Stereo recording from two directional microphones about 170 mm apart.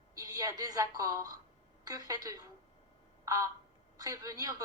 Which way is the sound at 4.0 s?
20° right (ahead or behind).